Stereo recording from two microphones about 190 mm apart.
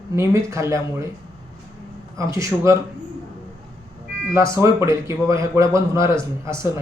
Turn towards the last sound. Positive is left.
turn(degrees=-15)  # may be behind; listen again after turning